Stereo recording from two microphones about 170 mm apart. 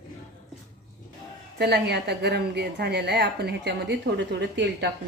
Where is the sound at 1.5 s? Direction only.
75° right (ahead or behind).